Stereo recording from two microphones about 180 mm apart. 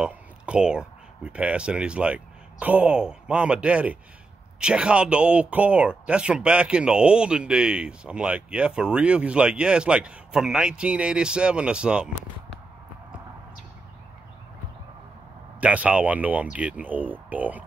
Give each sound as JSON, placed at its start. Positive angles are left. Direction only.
{"t": 0.0, "sound": "speech", "side_deg": -5}
{"t": 15.6, "sound": "speech", "side_deg": -10}